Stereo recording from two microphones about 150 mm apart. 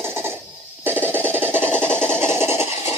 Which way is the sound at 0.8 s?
15° right (ahead or behind).